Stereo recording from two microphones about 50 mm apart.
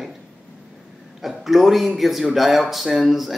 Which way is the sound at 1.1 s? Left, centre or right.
Centre.